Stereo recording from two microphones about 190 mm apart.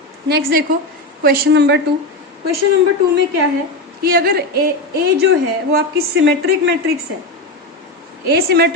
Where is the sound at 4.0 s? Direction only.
50° right (ahead or behind).